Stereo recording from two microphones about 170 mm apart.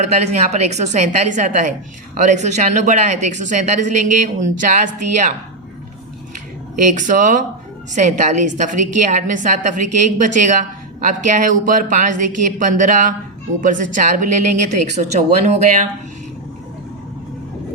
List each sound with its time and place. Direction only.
0.0 s a woman's voice: 40° right (ahead or behind)
6.8 s a woman's voice: 50° right (ahead or behind)